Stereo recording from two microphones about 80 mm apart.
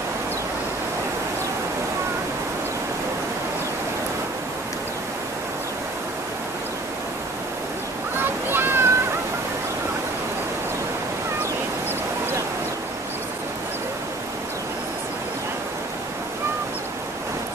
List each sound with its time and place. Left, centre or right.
8.2 s waves: right